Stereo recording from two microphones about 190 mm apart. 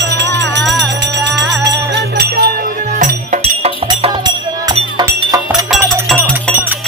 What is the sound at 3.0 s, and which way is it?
Music, 35° right (ahead or behind).